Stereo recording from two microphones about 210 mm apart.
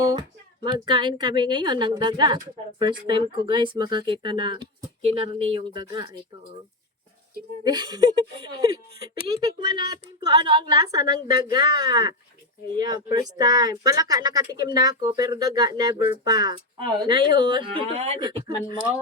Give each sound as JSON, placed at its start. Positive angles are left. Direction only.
{"t": 0.0, "sound": "a woman's voice", "side_deg": -20}
{"t": 7.6, "sound": "a woman's voice", "side_deg": -20}